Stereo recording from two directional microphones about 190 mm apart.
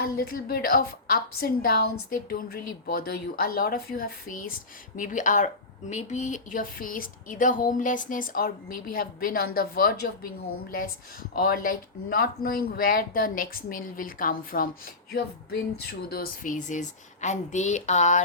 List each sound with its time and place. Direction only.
0.0 s a woman's voice: 55° left (ahead or behind)
11.3 s a woman's voice: 50° left (ahead or behind)